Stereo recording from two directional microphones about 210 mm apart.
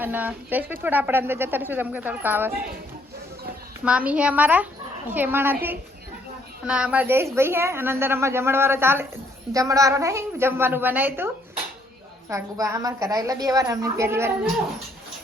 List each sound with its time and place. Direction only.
0.0 s speech: 10° right (ahead or behind)
3.8 s speech: 5° right (ahead or behind)
6.7 s speech: 5° right (ahead or behind)
12.3 s speech: 15° right (ahead or behind)